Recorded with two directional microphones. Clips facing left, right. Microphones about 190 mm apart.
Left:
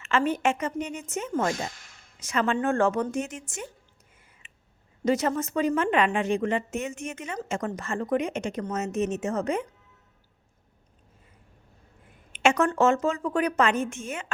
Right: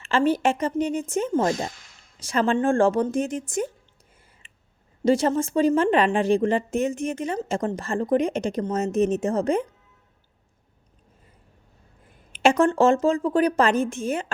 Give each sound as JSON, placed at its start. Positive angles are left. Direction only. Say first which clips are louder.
{"t": 0.0, "sound": "a woman's voice", "louder": "right 4 dB", "side_deg": -30}
{"t": 4.4, "sound": "clicking", "louder": "even", "side_deg": -30}
{"t": 5.0, "sound": "a woman's voice", "louder": "right 4 dB", "side_deg": -30}
{"t": 12.3, "sound": "a woman's voice", "louder": "right 4 dB", "side_deg": -35}